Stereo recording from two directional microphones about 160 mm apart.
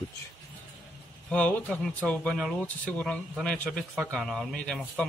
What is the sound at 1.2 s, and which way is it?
Speech, 10° left (ahead or behind).